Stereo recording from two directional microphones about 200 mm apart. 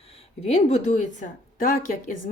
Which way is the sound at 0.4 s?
35° left (ahead or behind).